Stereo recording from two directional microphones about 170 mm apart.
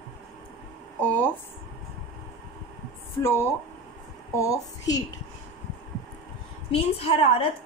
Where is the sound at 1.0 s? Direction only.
10° left (ahead or behind).